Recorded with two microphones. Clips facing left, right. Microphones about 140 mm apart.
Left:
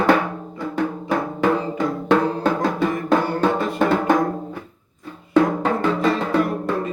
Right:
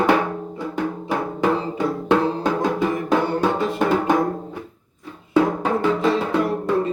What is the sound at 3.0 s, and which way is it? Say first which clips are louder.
Music: left 2 dB; 10° right (ahead or behind).